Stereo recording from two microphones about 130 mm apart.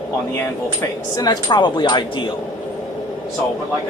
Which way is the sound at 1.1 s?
30° left (ahead or behind).